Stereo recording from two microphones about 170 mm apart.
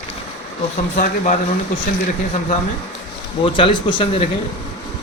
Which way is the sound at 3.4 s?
30° left (ahead or behind).